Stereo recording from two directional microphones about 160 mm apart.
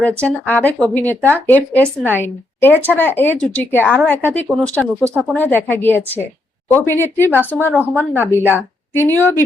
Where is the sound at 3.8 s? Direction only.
5° right (ahead or behind).